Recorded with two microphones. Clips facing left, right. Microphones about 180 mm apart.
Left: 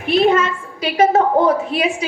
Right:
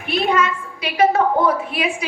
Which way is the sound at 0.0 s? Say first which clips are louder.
Left 5 dB; 40° left (ahead or behind).